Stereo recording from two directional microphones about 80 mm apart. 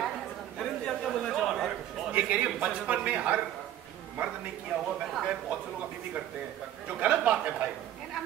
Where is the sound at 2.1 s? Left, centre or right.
Centre.